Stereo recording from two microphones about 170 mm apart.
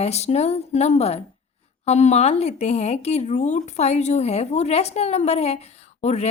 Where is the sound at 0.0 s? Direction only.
40° left (ahead or behind).